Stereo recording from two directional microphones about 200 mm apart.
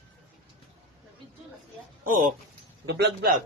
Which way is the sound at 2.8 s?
55° right (ahead or behind).